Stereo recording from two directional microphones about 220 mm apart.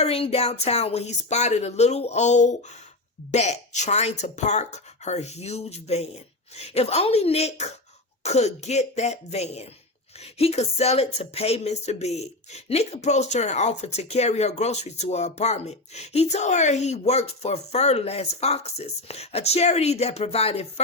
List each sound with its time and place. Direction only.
0.0 s speech: 25° left (ahead or behind)